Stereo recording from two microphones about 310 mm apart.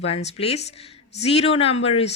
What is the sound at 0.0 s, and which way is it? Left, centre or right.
Speech, centre.